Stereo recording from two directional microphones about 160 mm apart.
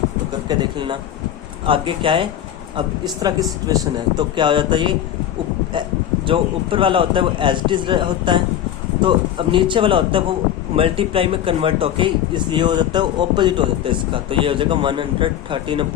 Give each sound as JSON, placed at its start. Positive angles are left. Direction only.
{"t": 0.4, "sound": "speech", "side_deg": -30}
{"t": 6.2, "sound": "speech", "side_deg": -35}